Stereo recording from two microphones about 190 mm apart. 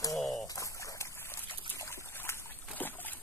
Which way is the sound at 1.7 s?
15° left (ahead or behind).